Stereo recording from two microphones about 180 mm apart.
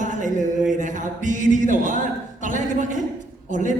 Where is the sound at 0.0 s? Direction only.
45° right (ahead or behind).